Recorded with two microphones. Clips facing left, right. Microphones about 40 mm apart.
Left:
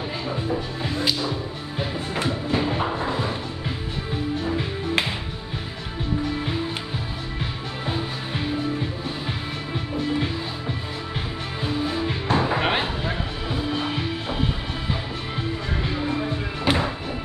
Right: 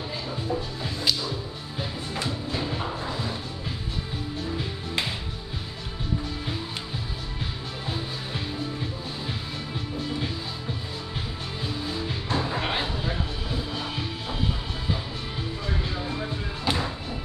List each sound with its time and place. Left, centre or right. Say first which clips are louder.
2.1 s music: left 6 dB; left
7.8 s music: left 5 dB; left
11.6 s music: left 7 dB; left
15.8 s music: left 5 dB; left